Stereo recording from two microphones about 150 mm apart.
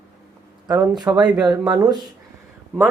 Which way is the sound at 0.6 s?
20° right (ahead or behind).